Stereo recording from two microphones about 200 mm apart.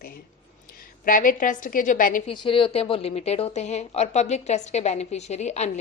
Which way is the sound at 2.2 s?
25° left (ahead or behind).